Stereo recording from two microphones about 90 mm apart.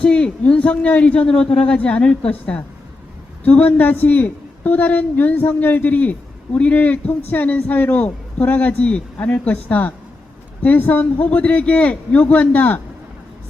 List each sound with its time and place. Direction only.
0.0 s a man's voice: 10° left (ahead or behind)